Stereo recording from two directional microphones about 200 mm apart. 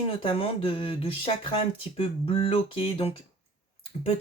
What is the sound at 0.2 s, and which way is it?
Speech, 25° left (ahead or behind).